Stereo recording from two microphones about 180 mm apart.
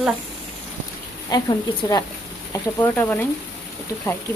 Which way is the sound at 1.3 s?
25° left (ahead or behind).